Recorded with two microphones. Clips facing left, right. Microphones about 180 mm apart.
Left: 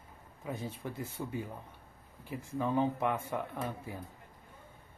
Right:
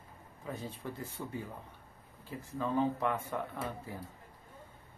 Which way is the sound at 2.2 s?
15° left (ahead or behind).